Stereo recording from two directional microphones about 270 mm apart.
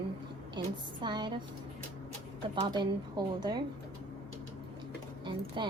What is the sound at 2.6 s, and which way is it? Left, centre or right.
Speech, centre.